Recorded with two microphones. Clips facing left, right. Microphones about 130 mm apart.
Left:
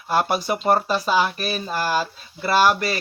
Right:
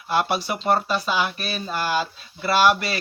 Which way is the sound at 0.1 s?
40° left (ahead or behind).